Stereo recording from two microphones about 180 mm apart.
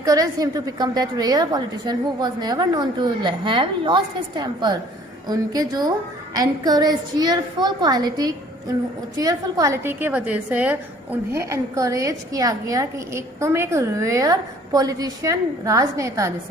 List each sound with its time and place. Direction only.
0.0 s a woman's voice: 20° right (ahead or behind)